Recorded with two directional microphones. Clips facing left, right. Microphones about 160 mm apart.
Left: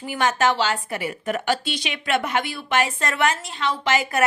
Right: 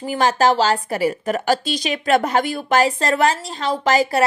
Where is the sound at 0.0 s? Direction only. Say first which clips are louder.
Right 4 dB; 35° right (ahead or behind).